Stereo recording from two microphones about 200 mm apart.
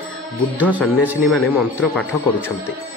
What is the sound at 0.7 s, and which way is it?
Speech, 10° right (ahead or behind).